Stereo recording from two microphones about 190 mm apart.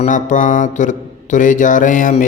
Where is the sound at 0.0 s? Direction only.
40° left (ahead or behind).